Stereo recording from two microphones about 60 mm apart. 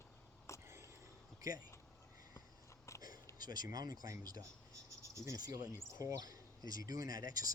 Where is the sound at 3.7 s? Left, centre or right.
Right.